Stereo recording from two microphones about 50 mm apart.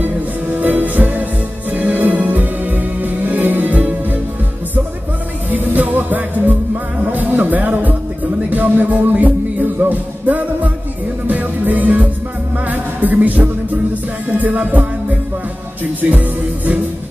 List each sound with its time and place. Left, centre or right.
0.6 s music: right
5.5 s music: right